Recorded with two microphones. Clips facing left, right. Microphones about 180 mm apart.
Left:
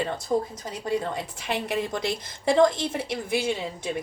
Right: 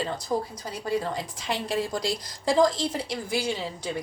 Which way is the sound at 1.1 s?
25° left (ahead or behind).